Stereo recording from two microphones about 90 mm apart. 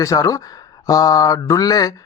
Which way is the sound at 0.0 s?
40° left (ahead or behind).